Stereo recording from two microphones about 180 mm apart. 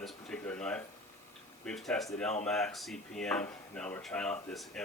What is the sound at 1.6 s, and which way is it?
A man's voice, 5° left (ahead or behind).